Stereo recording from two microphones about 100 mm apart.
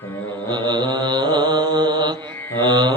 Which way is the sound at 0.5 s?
50° right (ahead or behind).